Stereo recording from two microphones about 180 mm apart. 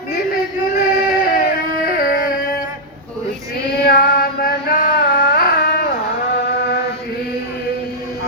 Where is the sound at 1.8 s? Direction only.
55° left (ahead or behind).